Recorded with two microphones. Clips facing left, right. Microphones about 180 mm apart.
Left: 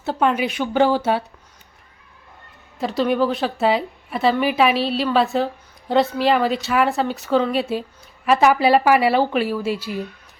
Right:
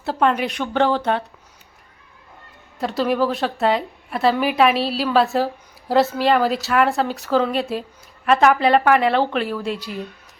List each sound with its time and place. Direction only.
0.0 s speech: centre (ahead or behind)
2.7 s speech: centre (ahead or behind)